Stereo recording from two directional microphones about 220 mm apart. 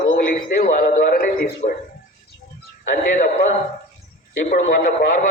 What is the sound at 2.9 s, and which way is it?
Speech, 40° left (ahead or behind).